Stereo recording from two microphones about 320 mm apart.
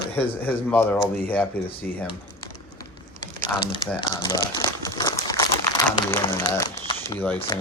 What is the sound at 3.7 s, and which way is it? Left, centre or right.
Speech, centre.